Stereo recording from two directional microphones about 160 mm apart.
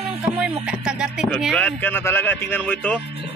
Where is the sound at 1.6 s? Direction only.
10° left (ahead or behind).